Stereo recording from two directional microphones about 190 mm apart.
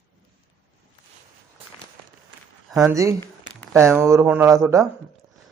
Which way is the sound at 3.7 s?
15° right (ahead or behind).